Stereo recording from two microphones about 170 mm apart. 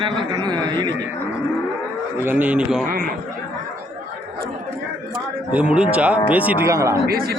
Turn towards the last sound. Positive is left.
turn(degrees=-65)  # may be behind; listen again after turning